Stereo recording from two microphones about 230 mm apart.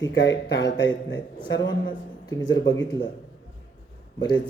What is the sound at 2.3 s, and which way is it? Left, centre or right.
Speech, centre.